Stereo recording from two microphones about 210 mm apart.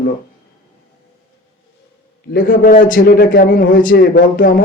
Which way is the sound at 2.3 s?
40° left (ahead or behind).